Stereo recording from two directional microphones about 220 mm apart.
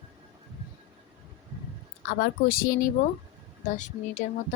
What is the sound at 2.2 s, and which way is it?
Speech, 40° left (ahead or behind).